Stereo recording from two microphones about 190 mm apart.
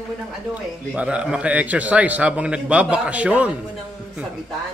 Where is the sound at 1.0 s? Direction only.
5° right (ahead or behind).